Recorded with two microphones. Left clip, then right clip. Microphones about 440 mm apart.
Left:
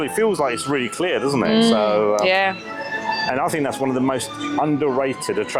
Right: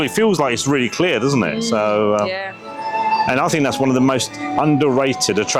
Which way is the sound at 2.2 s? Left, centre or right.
Centre.